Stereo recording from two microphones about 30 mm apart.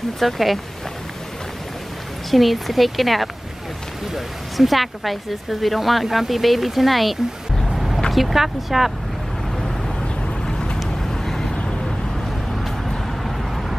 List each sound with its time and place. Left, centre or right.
0.2 s speech: centre
2.3 s speech: centre
7.7 s vehicle: centre
8.1 s speech: centre
11.0 s vehicle: centre